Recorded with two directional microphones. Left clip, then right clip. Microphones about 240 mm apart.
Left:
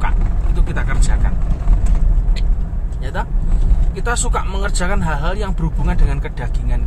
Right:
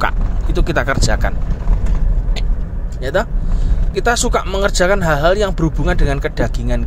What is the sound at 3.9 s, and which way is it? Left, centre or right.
Speech, right.